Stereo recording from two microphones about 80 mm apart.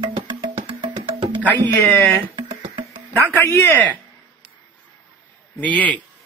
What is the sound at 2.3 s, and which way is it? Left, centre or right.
Music, right.